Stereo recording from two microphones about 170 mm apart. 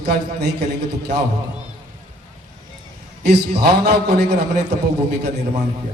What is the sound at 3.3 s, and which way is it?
A man's voice, 75° right (ahead or behind).